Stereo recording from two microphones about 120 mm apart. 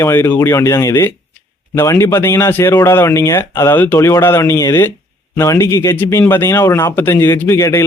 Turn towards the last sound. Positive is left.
turn(degrees=25)  # may be behind; listen again after turning